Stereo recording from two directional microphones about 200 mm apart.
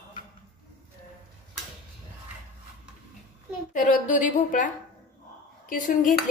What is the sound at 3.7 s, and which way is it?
A woman's voice, 40° left (ahead or behind).